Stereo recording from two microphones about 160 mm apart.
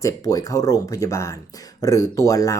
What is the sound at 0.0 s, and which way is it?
Speech, 20° left (ahead or behind).